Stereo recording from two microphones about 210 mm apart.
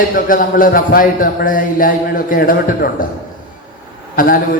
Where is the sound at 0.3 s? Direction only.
40° left (ahead or behind).